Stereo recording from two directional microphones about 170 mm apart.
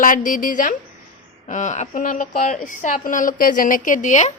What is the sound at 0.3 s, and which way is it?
A woman's voice, 50° left (ahead or behind).